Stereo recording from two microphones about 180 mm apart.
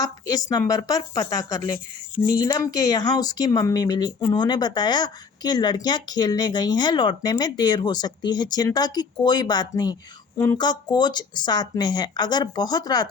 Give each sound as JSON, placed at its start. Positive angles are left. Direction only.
{"t": 0.0, "sound": "speech", "side_deg": 20}